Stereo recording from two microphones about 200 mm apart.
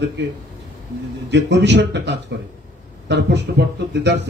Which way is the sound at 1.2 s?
60° right (ahead or behind).